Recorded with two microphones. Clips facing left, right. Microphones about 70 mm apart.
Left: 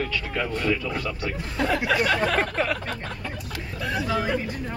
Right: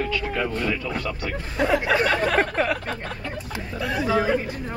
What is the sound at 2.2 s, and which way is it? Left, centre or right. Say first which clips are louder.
Speech: right 2 dB; centre.